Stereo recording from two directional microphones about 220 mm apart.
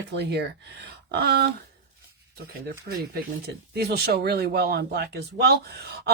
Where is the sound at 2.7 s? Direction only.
45° right (ahead or behind).